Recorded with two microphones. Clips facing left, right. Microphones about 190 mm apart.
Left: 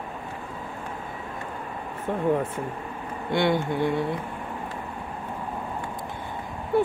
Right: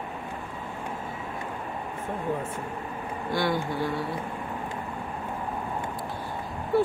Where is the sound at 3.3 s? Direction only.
25° left (ahead or behind).